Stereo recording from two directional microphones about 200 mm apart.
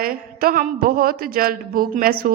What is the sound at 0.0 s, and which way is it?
A woman's voice, 45° right (ahead or behind).